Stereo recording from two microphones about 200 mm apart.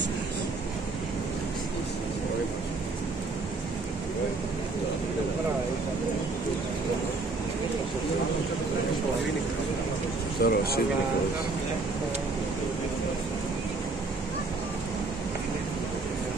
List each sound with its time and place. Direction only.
10.4 s speech: 50° left (ahead or behind)